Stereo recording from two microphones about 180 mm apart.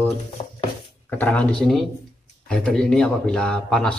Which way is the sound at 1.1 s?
10° left (ahead or behind).